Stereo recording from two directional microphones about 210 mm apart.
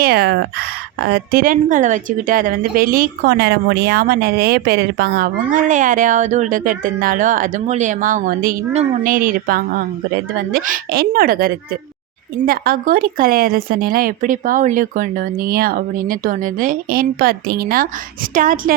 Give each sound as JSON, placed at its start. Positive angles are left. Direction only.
{"t": 0.0, "sound": "a woman's voice", "side_deg": -50}